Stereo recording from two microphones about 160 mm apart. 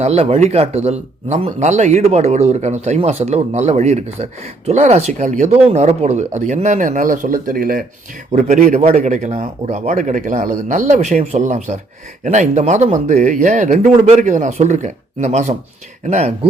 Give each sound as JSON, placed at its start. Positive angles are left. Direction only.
{"t": 0.0, "sound": "speech", "side_deg": -40}
{"t": 8.3, "sound": "speech", "side_deg": -50}